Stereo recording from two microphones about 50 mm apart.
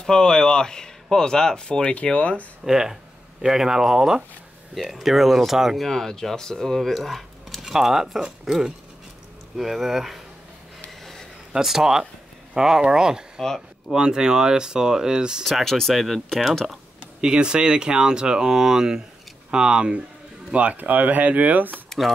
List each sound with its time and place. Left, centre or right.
0.0 s speech: centre
1.7 s speech: left
2.6 s speech: centre
5.9 s speech: centre
7.6 s speech: centre
11.5 s speech: centre
13.4 s speech: centre
13.9 s speech: centre
15.4 s speech: centre
17.2 s speech: centre
20.5 s speech: right
21.8 s a sound: centre